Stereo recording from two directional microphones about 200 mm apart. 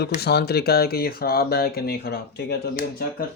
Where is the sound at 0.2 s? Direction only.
55° left (ahead or behind).